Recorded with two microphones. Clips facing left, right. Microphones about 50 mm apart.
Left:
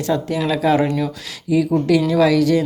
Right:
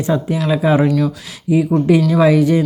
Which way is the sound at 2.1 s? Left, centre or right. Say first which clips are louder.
Right 2 dB; right.